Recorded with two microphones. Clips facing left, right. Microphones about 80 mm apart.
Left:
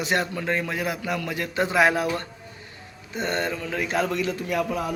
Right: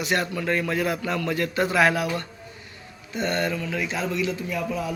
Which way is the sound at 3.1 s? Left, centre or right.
Left.